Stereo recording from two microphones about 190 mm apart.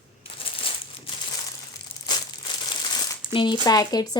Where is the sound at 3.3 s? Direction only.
25° left (ahead or behind).